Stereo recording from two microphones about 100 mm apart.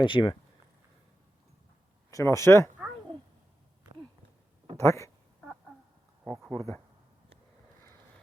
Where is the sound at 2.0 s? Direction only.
30° left (ahead or behind).